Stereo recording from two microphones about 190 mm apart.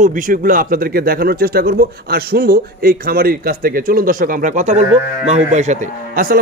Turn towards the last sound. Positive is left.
turn(degrees=-45)  # may be behind; listen again after turning